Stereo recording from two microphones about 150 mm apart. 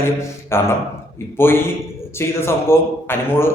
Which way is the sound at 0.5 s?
15° left (ahead or behind).